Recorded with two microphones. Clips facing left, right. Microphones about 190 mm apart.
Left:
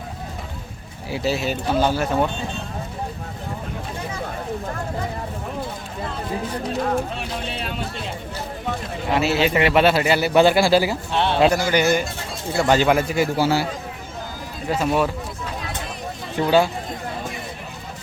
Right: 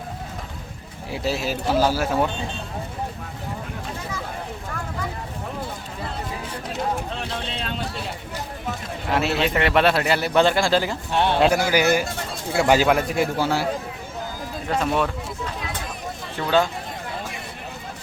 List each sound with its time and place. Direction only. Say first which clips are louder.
1.1 s a man's voice: left 2 dB; centre (ahead or behind)
7.5 s speech: left 1 dB; 10° left (ahead or behind)
9.0 s a man's voice: left 2 dB; centre (ahead or behind)
11.1 s a man's voice: even; 10° right (ahead or behind); by 13.7 s 5° left (ahead or behind)
14.7 s a man's voice: left 2 dB; 5° left (ahead or behind)
16.4 s speech: left 6 dB; 15° left (ahead or behind)